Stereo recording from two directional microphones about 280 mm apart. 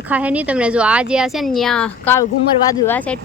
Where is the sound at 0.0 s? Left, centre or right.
Centre.